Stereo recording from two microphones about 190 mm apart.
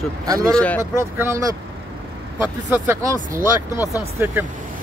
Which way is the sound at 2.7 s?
15° right (ahead or behind).